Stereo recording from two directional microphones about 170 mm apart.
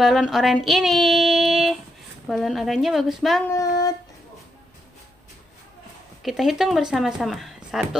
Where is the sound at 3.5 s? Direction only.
20° left (ahead or behind).